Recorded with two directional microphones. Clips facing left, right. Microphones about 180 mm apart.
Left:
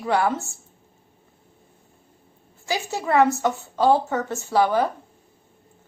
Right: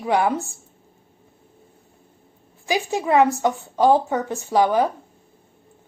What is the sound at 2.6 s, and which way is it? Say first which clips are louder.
A woman's voice: right 4 dB; 15° right (ahead or behind).